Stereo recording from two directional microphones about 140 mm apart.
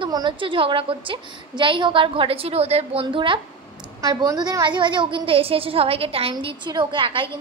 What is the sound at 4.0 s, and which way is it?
A woman's voice, 25° right (ahead or behind).